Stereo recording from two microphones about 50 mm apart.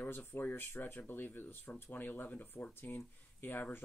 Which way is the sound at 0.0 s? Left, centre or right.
Left.